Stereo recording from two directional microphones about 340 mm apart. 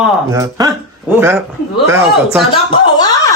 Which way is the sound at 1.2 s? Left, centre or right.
Centre.